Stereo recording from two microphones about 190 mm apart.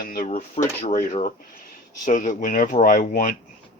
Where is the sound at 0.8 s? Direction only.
40° left (ahead or behind).